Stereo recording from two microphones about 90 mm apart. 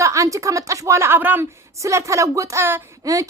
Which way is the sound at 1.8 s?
35° right (ahead or behind).